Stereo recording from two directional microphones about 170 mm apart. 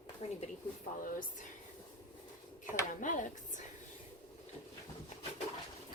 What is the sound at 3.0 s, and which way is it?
Speech, 50° left (ahead or behind).